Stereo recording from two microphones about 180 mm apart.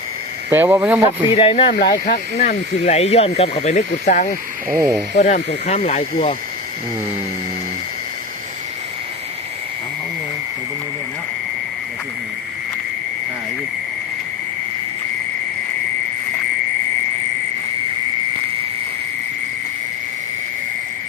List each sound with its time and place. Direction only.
0.5 s speech: 10° right (ahead or behind)
1.4 s speech: 30° left (ahead or behind)
1.8 s speech: 55° left (ahead or behind)
4.8 s speech: 20° right (ahead or behind)
5.1 s speech: 45° left (ahead or behind)